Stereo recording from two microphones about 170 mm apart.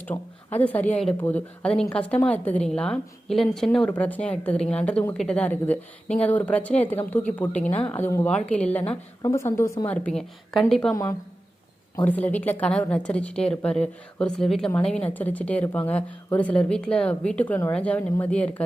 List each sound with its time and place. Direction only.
0.0 s a woman's voice: 10° left (ahead or behind)
9.9 s speech: 5° left (ahead or behind)
11.9 s a woman's voice: 10° left (ahead or behind)